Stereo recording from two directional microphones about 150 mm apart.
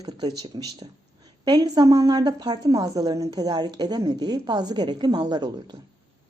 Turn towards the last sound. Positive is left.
turn(degrees=-30)  # may be behind; listen again after turning